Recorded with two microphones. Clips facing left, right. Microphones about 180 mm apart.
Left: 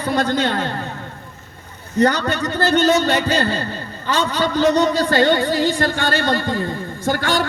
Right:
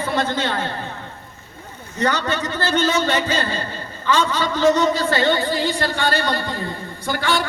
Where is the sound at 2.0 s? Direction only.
40° left (ahead or behind).